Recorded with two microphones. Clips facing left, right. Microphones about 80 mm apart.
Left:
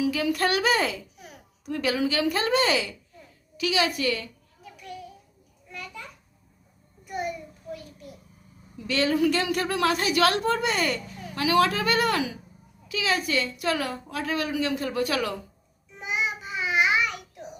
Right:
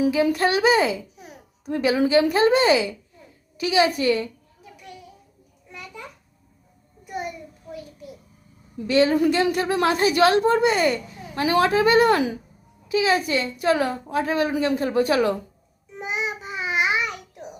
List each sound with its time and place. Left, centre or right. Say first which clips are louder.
0.3 s speech: right 4 dB; right
8.9 s a woman's voice: right 5 dB; right
16.0 s child singing: right 1 dB; right